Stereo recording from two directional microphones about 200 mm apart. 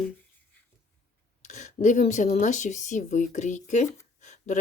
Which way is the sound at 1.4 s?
35° left (ahead or behind).